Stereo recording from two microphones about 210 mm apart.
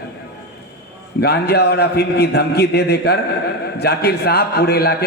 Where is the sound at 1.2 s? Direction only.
50° left (ahead or behind).